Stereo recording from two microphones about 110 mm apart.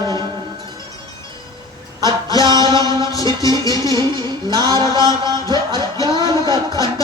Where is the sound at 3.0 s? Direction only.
30° left (ahead or behind).